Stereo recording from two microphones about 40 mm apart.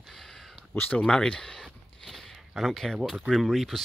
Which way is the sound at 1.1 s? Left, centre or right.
Centre.